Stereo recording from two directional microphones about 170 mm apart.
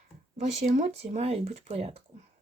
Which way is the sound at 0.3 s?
45° right (ahead or behind).